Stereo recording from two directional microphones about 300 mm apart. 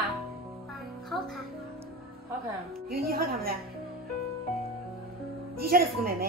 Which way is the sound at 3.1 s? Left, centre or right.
Right.